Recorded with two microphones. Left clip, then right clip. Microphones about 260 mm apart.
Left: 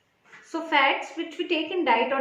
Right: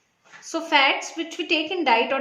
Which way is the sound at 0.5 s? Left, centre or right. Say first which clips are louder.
Right 3 dB; right.